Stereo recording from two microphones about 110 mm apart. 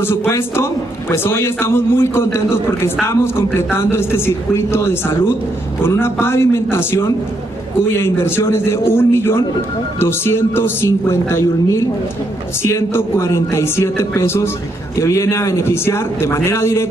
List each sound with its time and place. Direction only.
0.0 s a man's voice: 20° left (ahead or behind)